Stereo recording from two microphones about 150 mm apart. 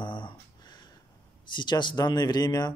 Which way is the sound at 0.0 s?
30° left (ahead or behind).